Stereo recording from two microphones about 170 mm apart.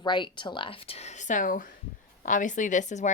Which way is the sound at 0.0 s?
25° left (ahead or behind).